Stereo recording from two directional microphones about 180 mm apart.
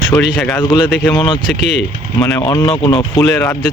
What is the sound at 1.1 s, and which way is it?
Speech, 25° left (ahead or behind).